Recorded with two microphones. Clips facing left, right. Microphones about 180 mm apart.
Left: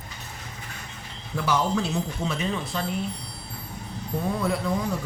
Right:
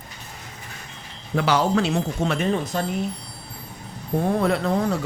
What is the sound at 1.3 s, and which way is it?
Speech, 75° right (ahead or behind).